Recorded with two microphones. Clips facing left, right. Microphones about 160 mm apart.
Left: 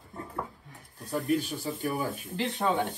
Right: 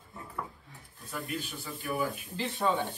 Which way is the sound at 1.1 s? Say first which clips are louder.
Left 9 dB; 40° left (ahead or behind).